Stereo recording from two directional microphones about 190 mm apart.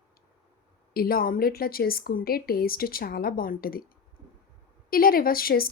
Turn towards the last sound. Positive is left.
turn(degrees=50)  # may be behind; listen again after turning